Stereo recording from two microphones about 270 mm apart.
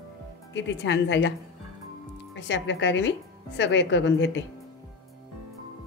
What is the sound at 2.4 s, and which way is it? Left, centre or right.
A woman's voice, left.